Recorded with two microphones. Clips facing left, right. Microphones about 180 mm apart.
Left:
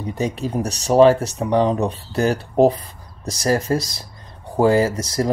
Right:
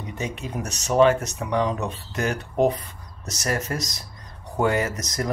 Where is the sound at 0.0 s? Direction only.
35° left (ahead or behind).